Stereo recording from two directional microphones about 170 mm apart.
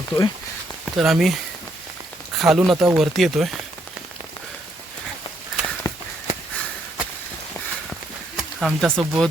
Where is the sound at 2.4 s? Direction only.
Centre (ahead or behind).